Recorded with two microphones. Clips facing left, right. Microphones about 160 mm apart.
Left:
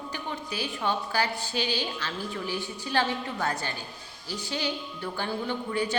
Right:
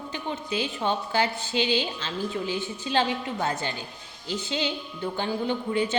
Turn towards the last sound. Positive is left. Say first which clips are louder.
# right 3 dB
turn(degrees=-20)  # may be behind; listen again after turning